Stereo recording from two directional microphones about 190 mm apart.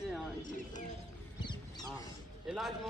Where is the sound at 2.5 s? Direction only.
Centre (ahead or behind).